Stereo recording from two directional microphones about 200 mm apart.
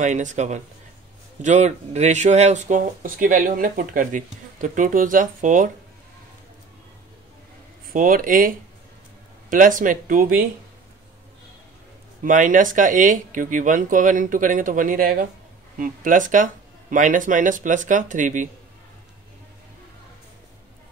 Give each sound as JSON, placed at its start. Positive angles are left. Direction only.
{"t": 0.0, "sound": "speech", "side_deg": -40}
{"t": 7.9, "sound": "speech", "side_deg": -45}
{"t": 12.2, "sound": "speech", "side_deg": -40}